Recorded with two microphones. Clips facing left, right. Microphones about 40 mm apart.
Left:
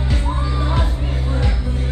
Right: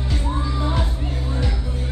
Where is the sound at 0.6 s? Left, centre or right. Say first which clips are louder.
Left 2 dB; centre.